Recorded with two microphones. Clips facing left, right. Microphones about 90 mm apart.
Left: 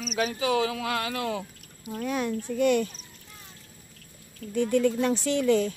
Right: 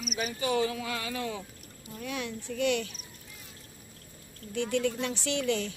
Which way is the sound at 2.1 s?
45° left (ahead or behind).